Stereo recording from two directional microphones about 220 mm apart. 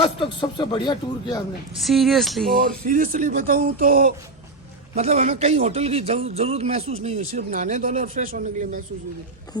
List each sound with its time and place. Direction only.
0.0 s speech: 20° left (ahead or behind)
1.8 s speech: centre (ahead or behind)
2.6 s a man's voice: 40° right (ahead or behind)